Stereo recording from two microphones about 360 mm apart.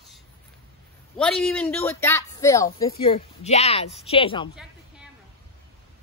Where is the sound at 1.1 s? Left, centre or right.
Centre.